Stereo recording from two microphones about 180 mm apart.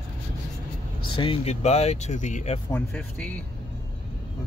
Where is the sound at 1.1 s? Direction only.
30° left (ahead or behind).